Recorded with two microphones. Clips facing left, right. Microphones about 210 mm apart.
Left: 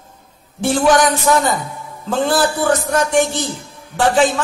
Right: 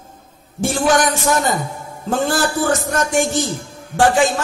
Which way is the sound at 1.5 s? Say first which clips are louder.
Even; 45° right (ahead or behind).